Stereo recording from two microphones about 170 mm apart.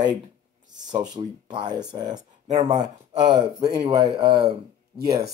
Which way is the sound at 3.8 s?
25° right (ahead or behind).